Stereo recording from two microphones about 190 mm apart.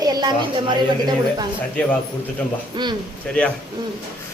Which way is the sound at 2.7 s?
25° right (ahead or behind).